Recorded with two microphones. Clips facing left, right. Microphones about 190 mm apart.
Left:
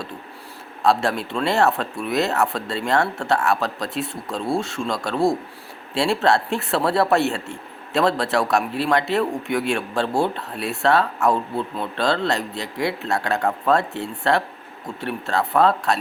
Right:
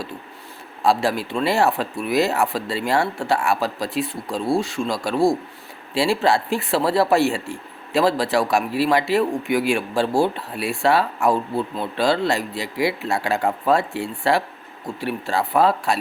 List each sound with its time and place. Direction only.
0.9 s speech: 5° right (ahead or behind)
4.0 s speech: 25° left (ahead or behind)
4.5 s speech: 5° right (ahead or behind)